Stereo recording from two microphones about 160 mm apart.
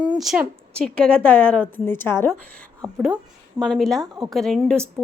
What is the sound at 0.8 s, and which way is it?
A woman's voice, 5° left (ahead or behind).